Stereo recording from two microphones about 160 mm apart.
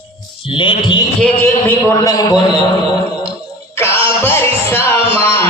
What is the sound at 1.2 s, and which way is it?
A man's voice, 10° left (ahead or behind).